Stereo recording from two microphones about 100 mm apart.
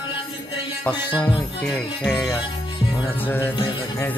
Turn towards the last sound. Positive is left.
turn(degrees=20)  # may be behind; listen again after turning